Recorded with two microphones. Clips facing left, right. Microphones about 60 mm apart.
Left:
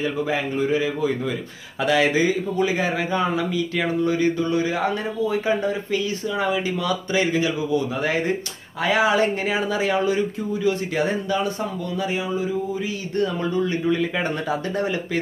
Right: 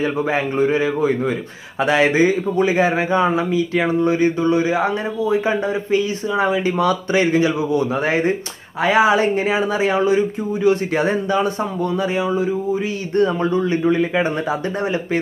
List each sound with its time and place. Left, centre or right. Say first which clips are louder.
0.0 s a man's voice: right 4 dB; right
13.1 s a man's voice: right 6 dB; right